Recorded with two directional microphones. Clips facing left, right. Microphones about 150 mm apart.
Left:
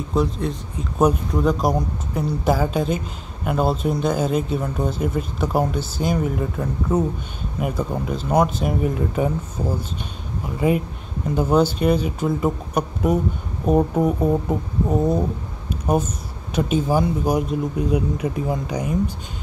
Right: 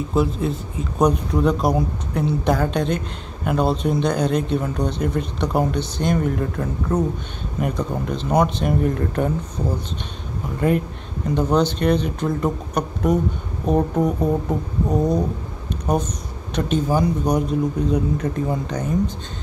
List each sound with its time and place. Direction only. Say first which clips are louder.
0.1 s speech: right 1 dB; 5° right (ahead or behind)
11.2 s speech: left 1 dB; 5° left (ahead or behind)